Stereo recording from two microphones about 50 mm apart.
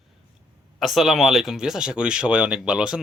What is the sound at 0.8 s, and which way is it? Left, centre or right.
Speech, centre.